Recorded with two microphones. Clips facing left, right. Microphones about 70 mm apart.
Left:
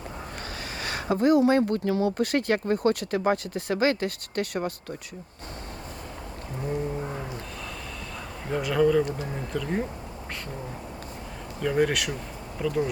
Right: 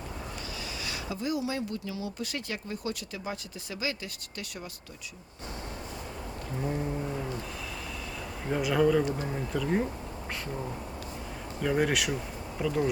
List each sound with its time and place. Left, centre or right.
0.8 s speech: left
8.4 s speech: centre
11.6 s speech: centre